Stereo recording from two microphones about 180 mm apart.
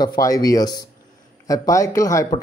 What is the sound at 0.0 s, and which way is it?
Speech, 20° left (ahead or behind).